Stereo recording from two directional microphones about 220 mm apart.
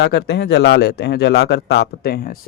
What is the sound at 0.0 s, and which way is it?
Speech, 50° left (ahead or behind).